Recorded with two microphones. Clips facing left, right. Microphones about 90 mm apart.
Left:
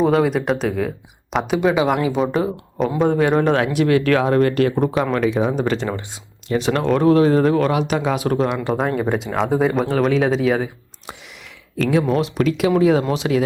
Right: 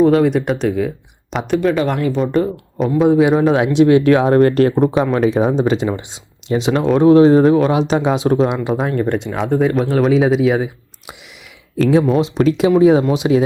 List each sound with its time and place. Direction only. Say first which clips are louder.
0.0 s speech: right 4 dB; centre (ahead or behind)
3.6 s speech: right 6 dB; 25° right (ahead or behind)
4.2 s speech: right 4 dB; 35° right (ahead or behind)
5.5 s speech: right 5 dB; 20° right (ahead or behind)
8.7 s speech: right 2 dB; centre (ahead or behind)
11.8 s speech: right 4 dB; 30° right (ahead or behind)